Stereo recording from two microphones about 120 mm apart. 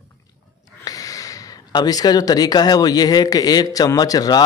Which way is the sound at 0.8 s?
30° left (ahead or behind).